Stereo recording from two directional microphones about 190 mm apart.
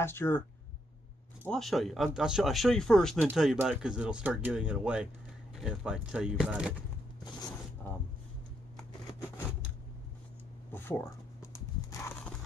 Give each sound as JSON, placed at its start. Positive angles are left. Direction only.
{"t": 0.0, "sound": "speech", "side_deg": 10}
{"t": 1.5, "sound": "speech", "side_deg": 0}
{"t": 10.7, "sound": "a sound", "side_deg": 10}
{"t": 11.5, "sound": "horse", "side_deg": 15}